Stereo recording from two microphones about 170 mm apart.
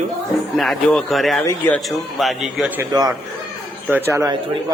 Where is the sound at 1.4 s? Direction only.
15° left (ahead or behind).